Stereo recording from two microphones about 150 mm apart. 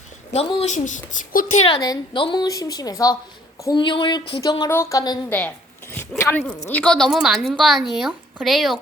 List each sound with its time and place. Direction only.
0.3 s a woman's voice: 50° left (ahead or behind)
1.6 s a woman's voice: 30° left (ahead or behind)
3.6 s a sound: 30° left (ahead or behind)
4.7 s a woman's voice: 20° left (ahead or behind)
6.0 s zipper: 15° left (ahead or behind)
6.7 s speech: 5° left (ahead or behind)